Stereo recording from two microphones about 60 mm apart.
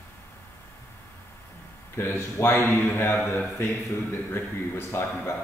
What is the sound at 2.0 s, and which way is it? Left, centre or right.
A man's voice, left.